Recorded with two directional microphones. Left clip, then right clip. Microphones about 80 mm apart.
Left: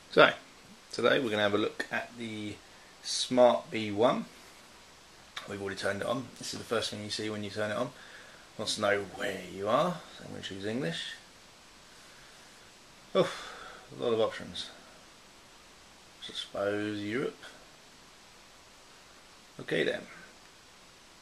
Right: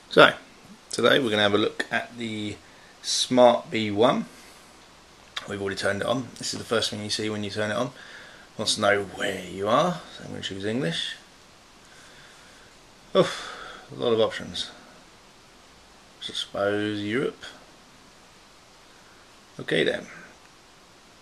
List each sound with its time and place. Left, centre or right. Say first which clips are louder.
0.1 s speech: right 6 dB; right
5.3 s speech: right 7 dB; right
13.1 s speech: right 7 dB; right
16.3 s speech: right 7 dB; right
19.6 s speech: right 7 dB; right